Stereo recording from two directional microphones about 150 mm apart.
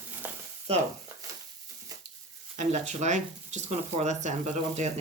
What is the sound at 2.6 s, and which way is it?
Speech, 50° right (ahead or behind).